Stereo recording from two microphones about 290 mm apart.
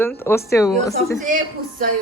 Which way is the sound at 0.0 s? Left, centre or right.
Centre.